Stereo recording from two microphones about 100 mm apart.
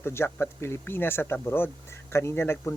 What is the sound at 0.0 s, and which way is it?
Speech, 25° left (ahead or behind).